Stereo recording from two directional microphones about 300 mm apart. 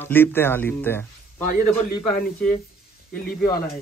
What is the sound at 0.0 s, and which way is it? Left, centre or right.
Speech, centre.